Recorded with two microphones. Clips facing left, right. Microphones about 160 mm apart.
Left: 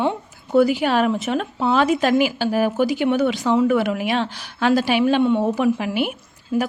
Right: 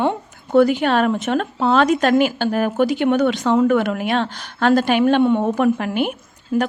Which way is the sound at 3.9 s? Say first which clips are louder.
Right 1 dB; 50° right (ahead or behind).